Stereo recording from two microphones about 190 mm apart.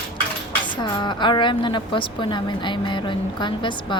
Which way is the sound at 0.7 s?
25° left (ahead or behind).